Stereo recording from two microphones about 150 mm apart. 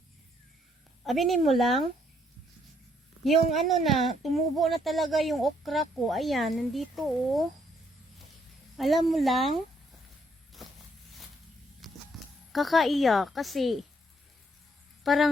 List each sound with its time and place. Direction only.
1.0 s speech: centre (ahead or behind)
3.5 s speech: centre (ahead or behind)
8.7 s speech: centre (ahead or behind)
10.6 s walk: centre (ahead or behind)
11.8 s a sound: centre (ahead or behind)
12.5 s speech: centre (ahead or behind)
15.0 s speech: centre (ahead or behind)